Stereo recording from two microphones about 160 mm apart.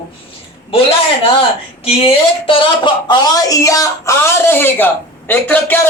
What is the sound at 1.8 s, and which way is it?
Speech, 35° left (ahead or behind).